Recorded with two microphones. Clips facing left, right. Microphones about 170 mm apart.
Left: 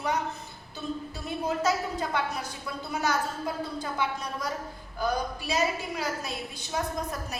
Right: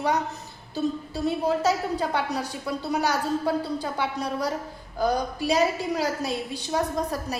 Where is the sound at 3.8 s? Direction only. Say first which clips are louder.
Right 3 dB; 35° right (ahead or behind).